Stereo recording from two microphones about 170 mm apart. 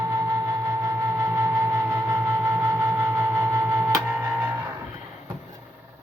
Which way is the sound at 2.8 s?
15° right (ahead or behind).